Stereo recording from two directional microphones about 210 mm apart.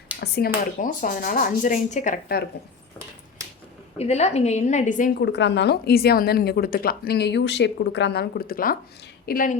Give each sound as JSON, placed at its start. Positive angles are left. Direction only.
{"t": 0.2, "sound": "speech", "side_deg": 45}
{"t": 3.9, "sound": "a woman's voice", "side_deg": 30}